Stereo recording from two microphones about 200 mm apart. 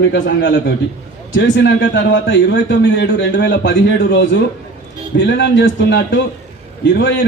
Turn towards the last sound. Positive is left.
turn(degrees=60)  # may be behind; listen again after turning